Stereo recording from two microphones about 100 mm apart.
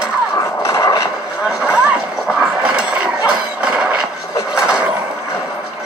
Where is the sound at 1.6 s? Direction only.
10° right (ahead or behind).